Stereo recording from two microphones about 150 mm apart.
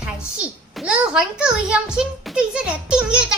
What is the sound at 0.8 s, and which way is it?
A child's voice, 5° right (ahead or behind).